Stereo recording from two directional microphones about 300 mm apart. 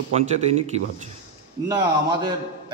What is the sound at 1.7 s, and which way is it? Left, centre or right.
Speech, centre.